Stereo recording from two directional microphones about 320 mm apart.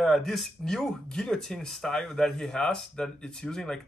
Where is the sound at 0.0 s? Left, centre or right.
Centre.